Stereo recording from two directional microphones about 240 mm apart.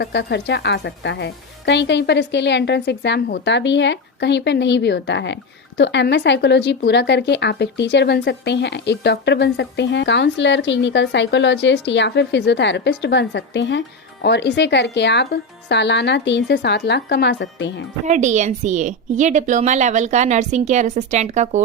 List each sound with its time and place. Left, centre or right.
0.0 s speech: left
18.0 s a woman's voice: right